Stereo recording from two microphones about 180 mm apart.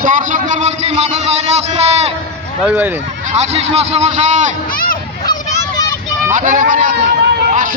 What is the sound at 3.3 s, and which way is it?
A man's voice, 35° right (ahead or behind).